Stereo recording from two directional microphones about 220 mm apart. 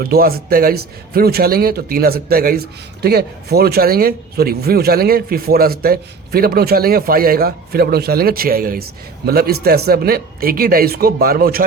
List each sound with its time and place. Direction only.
0.0 s a man's voice: 45° right (ahead or behind)